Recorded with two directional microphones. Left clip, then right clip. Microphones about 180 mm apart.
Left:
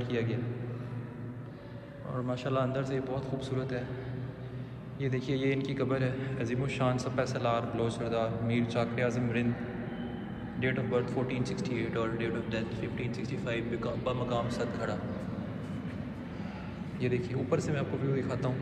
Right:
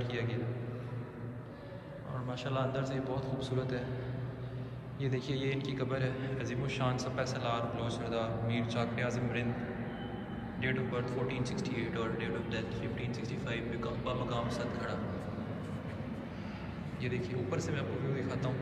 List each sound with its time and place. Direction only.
0.1 s a man's voice: 10° right (ahead or behind)
2.2 s a man's voice: 15° right (ahead or behind)
5.0 s a man's voice: 20° right (ahead or behind)
10.6 s a man's voice: 10° right (ahead or behind)
17.0 s a man's voice: 10° right (ahead or behind)